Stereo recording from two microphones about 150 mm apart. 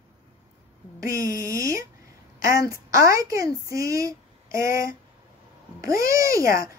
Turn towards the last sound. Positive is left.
turn(degrees=-20)  # may be behind; listen again after turning